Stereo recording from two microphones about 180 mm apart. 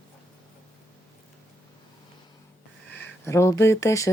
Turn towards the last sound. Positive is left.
turn(degrees=15)  # may be behind; listen again after turning